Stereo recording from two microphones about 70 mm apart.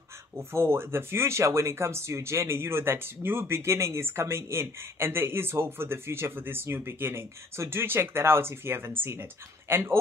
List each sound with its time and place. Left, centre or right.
0.4 s speech: right